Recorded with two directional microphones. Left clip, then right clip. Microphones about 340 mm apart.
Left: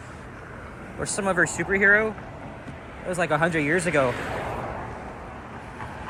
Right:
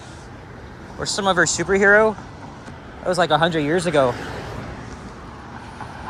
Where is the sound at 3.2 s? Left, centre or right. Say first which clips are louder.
Right 3 dB; centre.